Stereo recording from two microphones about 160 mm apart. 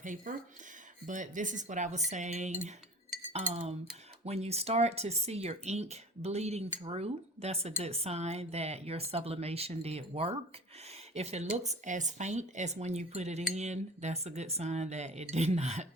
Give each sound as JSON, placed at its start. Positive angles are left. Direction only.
{"t": 0.0, "sound": "speech", "side_deg": -55}